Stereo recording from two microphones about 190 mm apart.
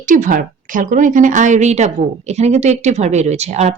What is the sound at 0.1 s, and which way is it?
A woman's voice, 45° right (ahead or behind).